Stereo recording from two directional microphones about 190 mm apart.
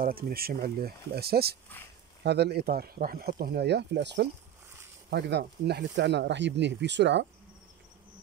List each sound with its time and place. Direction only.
0.0 s speech: 50° right (ahead or behind)